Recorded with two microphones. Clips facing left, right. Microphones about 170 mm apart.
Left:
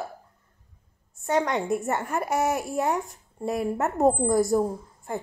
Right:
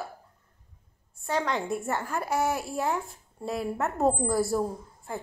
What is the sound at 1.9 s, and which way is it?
Speech, 20° left (ahead or behind).